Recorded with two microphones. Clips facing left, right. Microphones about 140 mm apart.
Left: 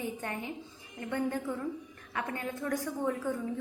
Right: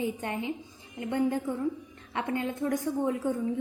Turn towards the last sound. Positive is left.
turn(degrees=-20)  # may be behind; listen again after turning